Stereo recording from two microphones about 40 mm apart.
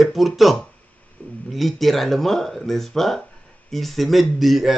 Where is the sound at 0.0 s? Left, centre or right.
Centre.